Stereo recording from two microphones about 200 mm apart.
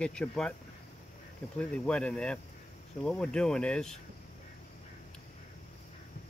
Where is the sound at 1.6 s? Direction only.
5° left (ahead or behind).